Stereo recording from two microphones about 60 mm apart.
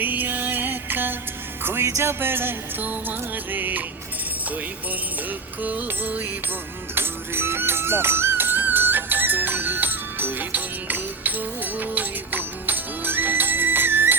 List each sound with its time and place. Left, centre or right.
0.0 s music: right
5.6 s music: right
6.9 s music: right